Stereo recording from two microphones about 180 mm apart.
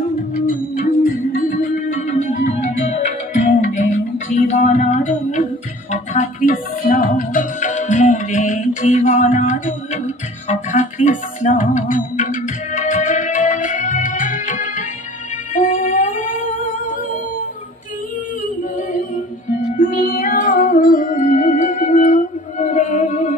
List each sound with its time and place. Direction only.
1.6 s music: 45° left (ahead or behind)
19.8 s music: 50° left (ahead or behind)